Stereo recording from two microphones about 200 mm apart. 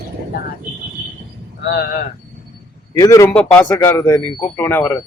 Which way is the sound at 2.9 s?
15° left (ahead or behind).